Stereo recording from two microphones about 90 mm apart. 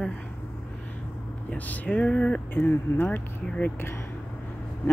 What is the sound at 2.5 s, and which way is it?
Speech, 20° left (ahead or behind).